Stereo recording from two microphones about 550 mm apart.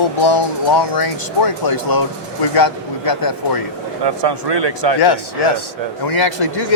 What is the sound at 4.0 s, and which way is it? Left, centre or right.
Speech, right.